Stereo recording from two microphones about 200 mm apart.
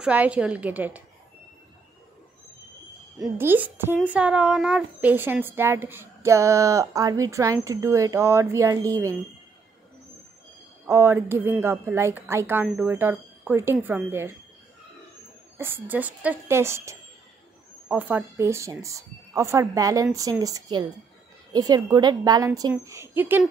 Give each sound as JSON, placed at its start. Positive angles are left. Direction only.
{"t": 0.0, "sound": "speech", "side_deg": -5}
{"t": 3.2, "sound": "speech", "side_deg": -10}
{"t": 10.9, "sound": "speech", "side_deg": -10}
{"t": 15.5, "sound": "a woman's voice", "side_deg": -10}